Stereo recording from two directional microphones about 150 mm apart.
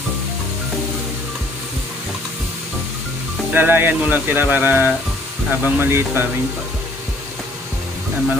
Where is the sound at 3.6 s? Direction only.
10° right (ahead or behind).